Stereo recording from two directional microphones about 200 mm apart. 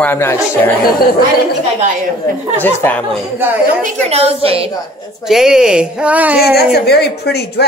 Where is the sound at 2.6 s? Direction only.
10° left (ahead or behind).